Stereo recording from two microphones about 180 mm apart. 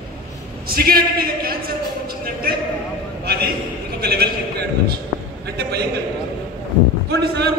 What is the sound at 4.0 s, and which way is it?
A man's voice, 60° right (ahead or behind).